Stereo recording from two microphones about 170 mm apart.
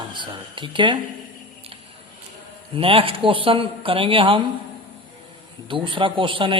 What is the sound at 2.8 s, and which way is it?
Speech, 35° right (ahead or behind).